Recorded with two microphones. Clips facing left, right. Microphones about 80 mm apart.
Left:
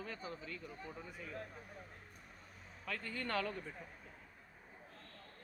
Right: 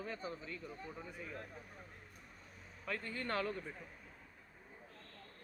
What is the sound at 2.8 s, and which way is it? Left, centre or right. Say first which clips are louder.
Speech: right 1 dB; right.